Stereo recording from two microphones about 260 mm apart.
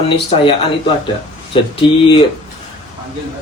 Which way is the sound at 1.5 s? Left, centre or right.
Left.